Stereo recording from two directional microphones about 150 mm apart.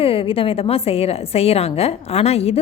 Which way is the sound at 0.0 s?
40° left (ahead or behind).